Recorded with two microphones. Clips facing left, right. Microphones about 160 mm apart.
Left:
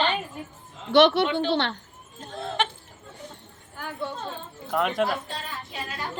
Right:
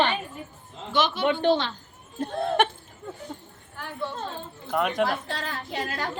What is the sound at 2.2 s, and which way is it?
Speech, 60° right (ahead or behind).